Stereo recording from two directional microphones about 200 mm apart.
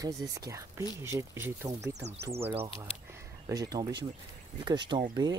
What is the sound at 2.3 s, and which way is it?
Speech, 30° right (ahead or behind).